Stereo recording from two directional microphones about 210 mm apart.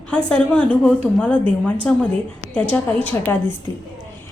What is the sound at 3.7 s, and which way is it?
Speech, 15° left (ahead or behind).